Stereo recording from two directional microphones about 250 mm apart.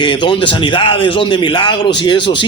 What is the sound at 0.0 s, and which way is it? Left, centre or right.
A man's voice, centre.